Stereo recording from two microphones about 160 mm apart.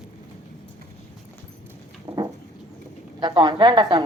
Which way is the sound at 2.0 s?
25° right (ahead or behind).